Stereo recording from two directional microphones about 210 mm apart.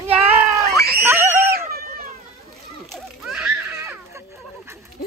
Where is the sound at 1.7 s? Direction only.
45° right (ahead or behind).